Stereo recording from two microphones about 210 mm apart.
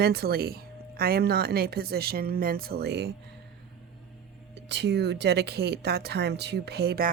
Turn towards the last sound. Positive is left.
turn(degrees=-45)  # may be behind; listen again after turning